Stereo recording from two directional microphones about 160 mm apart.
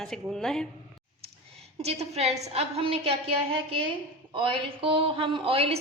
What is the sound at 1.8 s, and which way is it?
A woman's voice, 40° right (ahead or behind).